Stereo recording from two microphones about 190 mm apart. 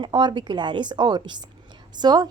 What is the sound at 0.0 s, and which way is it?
Speech, 25° right (ahead or behind).